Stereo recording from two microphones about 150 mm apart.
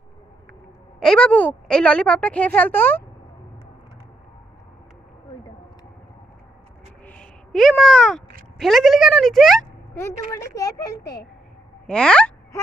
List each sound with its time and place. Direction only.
0.9 s a woman's voice: 5° left (ahead or behind)
7.0 s a sound: 5° left (ahead or behind)
8.5 s speech: centre (ahead or behind)
9.9 s a woman's voice: 15° left (ahead or behind)
11.9 s a woman's voice: 5° left (ahead or behind)